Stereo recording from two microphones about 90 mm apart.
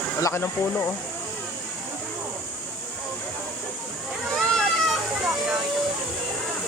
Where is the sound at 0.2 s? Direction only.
35° left (ahead or behind).